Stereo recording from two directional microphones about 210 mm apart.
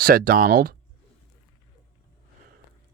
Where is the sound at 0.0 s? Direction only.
45° right (ahead or behind).